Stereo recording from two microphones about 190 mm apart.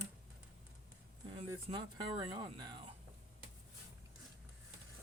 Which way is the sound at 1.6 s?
25° right (ahead or behind).